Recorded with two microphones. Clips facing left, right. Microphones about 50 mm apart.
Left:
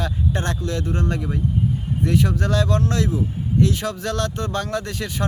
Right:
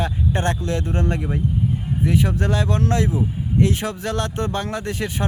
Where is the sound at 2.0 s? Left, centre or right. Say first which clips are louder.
Even; centre.